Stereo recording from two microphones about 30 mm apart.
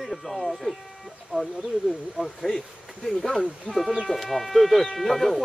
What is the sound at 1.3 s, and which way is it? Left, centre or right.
Speech, right.